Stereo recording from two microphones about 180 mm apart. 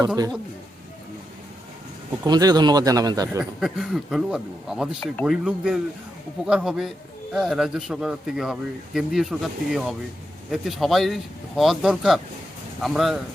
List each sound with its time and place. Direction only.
2.2 s speech: 20° right (ahead or behind)
3.6 s speech: centre (ahead or behind)